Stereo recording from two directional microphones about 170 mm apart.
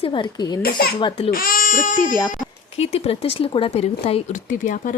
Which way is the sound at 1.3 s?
55° left (ahead or behind).